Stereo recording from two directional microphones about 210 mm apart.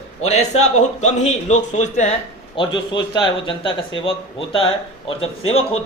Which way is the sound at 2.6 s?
20° left (ahead or behind).